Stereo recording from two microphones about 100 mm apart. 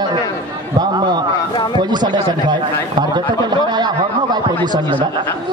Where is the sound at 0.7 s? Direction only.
45° right (ahead or behind).